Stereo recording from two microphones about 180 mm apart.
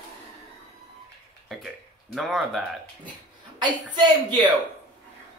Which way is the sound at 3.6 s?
25° right (ahead or behind).